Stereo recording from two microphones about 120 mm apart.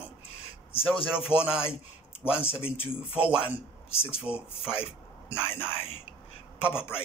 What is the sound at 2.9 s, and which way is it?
Speech, 10° right (ahead or behind).